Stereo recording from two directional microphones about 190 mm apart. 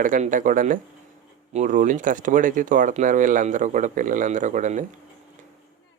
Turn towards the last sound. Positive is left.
turn(degrees=-40)  # may be behind; listen again after turning